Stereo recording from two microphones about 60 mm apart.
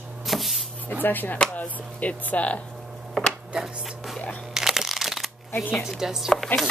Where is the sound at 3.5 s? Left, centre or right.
Centre.